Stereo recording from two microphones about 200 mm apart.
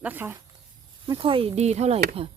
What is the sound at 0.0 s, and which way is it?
Speech, 10° right (ahead or behind).